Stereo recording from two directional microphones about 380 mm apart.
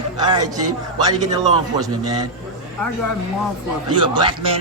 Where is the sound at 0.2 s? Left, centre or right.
Centre.